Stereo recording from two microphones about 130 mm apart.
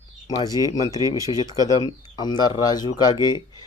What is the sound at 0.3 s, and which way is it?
Speech, 30° left (ahead or behind).